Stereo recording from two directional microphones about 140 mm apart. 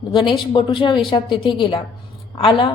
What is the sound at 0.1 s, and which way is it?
A woman's voice, 35° left (ahead or behind).